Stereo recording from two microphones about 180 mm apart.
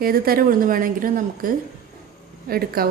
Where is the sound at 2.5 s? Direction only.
55° right (ahead or behind).